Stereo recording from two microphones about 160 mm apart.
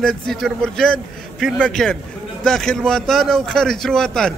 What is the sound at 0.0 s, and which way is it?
A man's voice, centre (ahead or behind).